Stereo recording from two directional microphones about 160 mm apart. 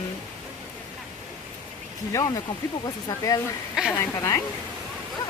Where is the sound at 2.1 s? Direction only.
25° left (ahead or behind).